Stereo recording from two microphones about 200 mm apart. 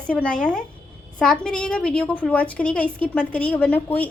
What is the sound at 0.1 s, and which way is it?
A woman's voice, 5° left (ahead or behind).